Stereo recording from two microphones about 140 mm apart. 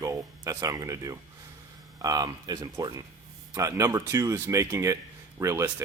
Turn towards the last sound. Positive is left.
turn(degrees=-20)  # may be behind; listen again after turning